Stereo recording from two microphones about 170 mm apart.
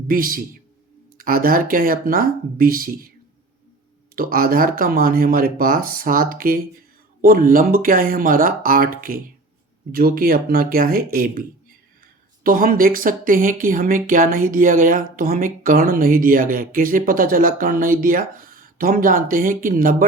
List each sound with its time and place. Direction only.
0.1 s speech: 55° right (ahead or behind)
4.1 s speech: 60° right (ahead or behind)